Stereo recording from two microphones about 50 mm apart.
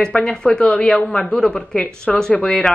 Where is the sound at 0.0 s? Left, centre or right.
Centre.